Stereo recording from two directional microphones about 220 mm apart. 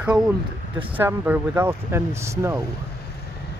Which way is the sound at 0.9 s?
10° right (ahead or behind).